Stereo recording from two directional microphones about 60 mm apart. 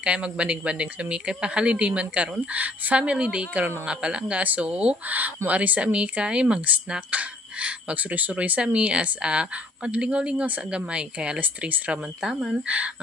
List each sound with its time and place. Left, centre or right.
0.0 s speech: centre
12.2 s speech: centre
12.6 s speech: right